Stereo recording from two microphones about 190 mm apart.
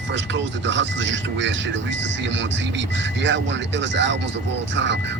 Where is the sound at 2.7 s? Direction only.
70° right (ahead or behind).